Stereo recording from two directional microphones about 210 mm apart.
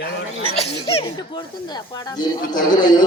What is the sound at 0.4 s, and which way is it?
Speech, 30° left (ahead or behind).